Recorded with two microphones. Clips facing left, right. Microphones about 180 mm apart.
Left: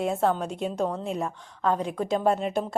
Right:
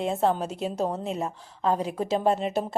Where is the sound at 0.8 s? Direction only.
25° right (ahead or behind).